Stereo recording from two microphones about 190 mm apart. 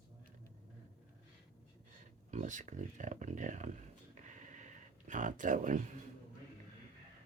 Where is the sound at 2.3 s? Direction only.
40° right (ahead or behind).